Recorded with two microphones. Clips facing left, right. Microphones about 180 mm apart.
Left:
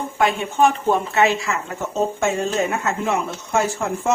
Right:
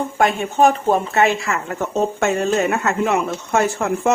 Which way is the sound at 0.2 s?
45° right (ahead or behind).